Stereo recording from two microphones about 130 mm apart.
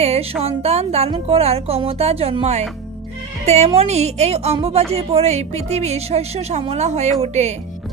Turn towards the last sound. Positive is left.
turn(degrees=-60)  # may be behind; listen again after turning